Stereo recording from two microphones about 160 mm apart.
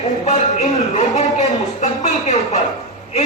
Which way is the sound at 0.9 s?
45° left (ahead or behind).